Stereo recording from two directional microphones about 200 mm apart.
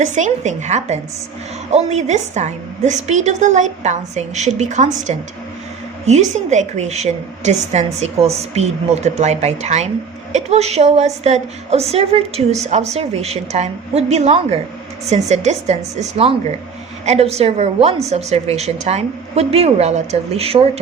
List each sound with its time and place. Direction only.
0.0 s a woman's voice: 35° right (ahead or behind)